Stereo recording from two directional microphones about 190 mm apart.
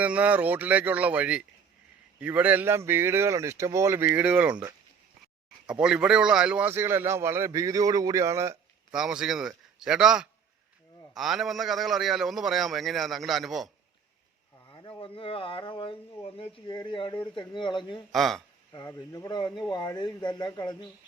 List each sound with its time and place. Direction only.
0.0 s a man's voice: 5° right (ahead or behind)
5.6 s a man's voice: 5° right (ahead or behind)
8.9 s a man's voice: 5° right (ahead or behind)
14.7 s speech: 25° left (ahead or behind)
18.1 s a man's voice: centre (ahead or behind)
18.7 s speech: 20° left (ahead or behind)